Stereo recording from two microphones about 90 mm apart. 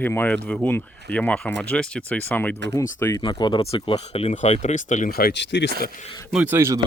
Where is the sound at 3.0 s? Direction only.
30° left (ahead or behind).